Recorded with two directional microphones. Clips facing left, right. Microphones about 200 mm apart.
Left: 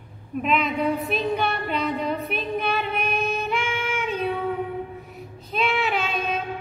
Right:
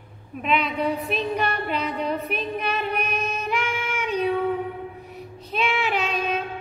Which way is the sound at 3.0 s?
40° right (ahead or behind).